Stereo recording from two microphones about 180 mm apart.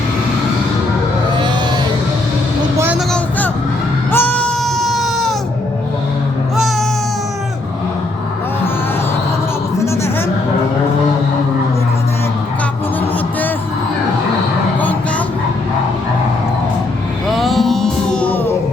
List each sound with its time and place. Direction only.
2.7 s vehicle: 10° right (ahead or behind)
3.1 s vehicle: 10° left (ahead or behind)
4.1 s a sound: 10° left (ahead or behind)
9.7 s music: 15° left (ahead or behind)
17.2 s music: centre (ahead or behind)